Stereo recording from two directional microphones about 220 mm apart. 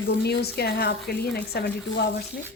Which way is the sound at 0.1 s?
45° left (ahead or behind).